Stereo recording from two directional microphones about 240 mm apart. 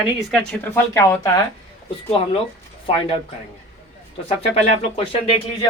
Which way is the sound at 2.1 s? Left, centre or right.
Left.